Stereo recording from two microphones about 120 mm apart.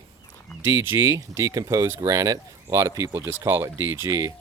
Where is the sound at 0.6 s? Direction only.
20° right (ahead or behind).